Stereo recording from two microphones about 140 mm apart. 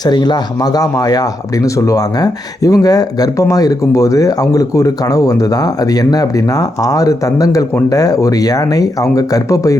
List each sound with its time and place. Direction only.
0.0 s speech: 30° left (ahead or behind)